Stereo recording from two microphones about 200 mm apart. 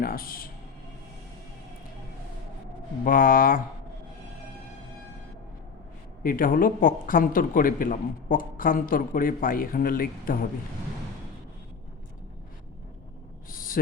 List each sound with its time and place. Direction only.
0.0 s speech: 45° left (ahead or behind)
3.0 s speech: 45° left (ahead or behind)
6.2 s speech: 45° left (ahead or behind)
13.5 s a sound: 45° left (ahead or behind)